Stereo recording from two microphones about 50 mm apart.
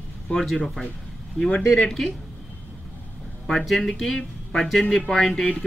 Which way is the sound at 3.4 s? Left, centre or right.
Centre.